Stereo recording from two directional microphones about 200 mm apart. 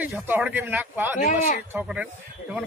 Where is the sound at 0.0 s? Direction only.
5° right (ahead or behind).